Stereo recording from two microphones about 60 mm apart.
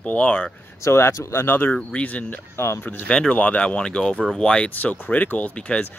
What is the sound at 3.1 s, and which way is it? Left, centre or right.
Speech, centre.